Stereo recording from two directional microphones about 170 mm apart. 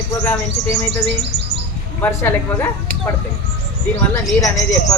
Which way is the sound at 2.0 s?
10° left (ahead or behind).